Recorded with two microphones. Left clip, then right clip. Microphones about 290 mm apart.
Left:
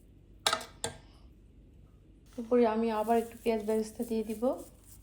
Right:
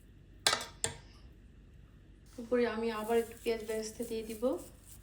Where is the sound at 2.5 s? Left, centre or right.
Centre.